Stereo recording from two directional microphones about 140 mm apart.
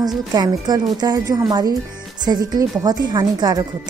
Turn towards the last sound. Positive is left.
turn(degrees=-30)  # may be behind; listen again after turning